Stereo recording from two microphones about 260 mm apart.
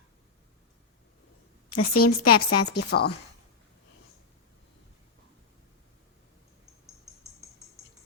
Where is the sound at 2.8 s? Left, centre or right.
Left.